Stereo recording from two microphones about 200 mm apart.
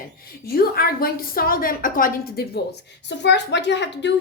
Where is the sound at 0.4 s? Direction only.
50° left (ahead or behind).